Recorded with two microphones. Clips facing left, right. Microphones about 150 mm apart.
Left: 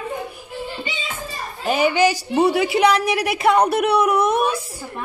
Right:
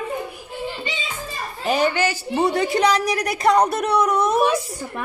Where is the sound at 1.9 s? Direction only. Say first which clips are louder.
Left 4 dB; 15° left (ahead or behind).